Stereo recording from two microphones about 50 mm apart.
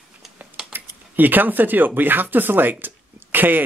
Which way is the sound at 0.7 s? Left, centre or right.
Right.